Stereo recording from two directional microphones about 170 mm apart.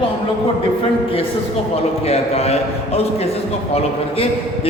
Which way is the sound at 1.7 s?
35° left (ahead or behind).